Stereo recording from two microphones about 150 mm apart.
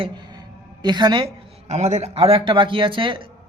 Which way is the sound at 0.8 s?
30° right (ahead or behind).